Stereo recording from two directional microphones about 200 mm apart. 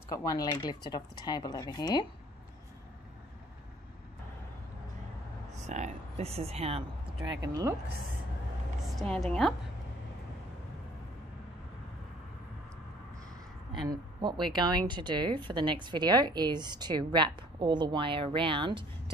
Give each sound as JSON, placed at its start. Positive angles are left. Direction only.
{"t": 0.1, "sound": "speech", "side_deg": 15}
{"t": 5.7, "sound": "speech", "side_deg": -35}
{"t": 7.2, "sound": "speech", "side_deg": -15}
{"t": 8.9, "sound": "a woman's voice", "side_deg": 0}
{"t": 13.8, "sound": "speech", "side_deg": -20}